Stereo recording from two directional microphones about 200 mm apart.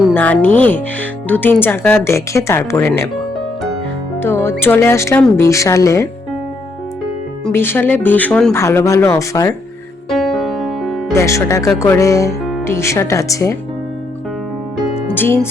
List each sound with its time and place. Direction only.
0.1 s speech: 10° left (ahead or behind)
4.2 s speech: 10° left (ahead or behind)
7.4 s speech: 10° left (ahead or behind)
10.1 s music: centre (ahead or behind)
11.1 s speech: 15° left (ahead or behind)
15.1 s speech: 10° left (ahead or behind)